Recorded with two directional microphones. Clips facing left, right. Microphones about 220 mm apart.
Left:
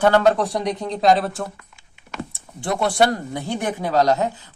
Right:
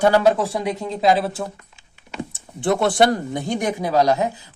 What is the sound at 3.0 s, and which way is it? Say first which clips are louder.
Speech: right 2 dB; 20° right (ahead or behind).